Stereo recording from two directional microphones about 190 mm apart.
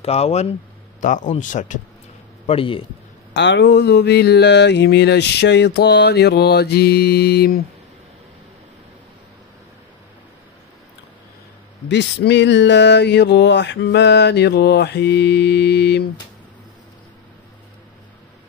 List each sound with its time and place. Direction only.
0.0 s speech: 35° left (ahead or behind)
2.4 s a man's voice: 30° left (ahead or behind)
3.3 s mantra: 65° left (ahead or behind)
11.9 s mantra: 65° left (ahead or behind)